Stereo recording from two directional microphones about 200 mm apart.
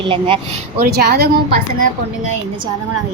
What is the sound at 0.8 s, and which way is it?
Speech, 55° right (ahead or behind).